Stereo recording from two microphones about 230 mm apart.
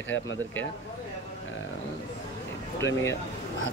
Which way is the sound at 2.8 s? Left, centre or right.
Centre.